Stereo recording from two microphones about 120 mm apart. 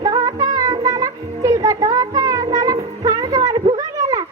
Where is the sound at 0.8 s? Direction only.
25° right (ahead or behind).